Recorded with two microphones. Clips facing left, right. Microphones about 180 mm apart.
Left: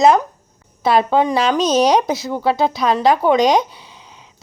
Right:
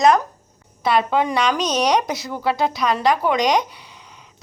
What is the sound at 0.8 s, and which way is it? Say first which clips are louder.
Speech: left 4 dB; 30° left (ahead or behind).